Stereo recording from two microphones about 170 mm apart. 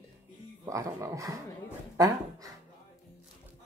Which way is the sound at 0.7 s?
20° right (ahead or behind).